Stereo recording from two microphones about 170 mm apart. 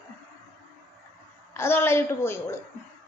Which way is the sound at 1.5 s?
15° left (ahead or behind).